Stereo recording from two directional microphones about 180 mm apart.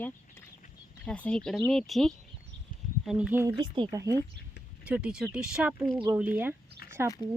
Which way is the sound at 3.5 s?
25° right (ahead or behind).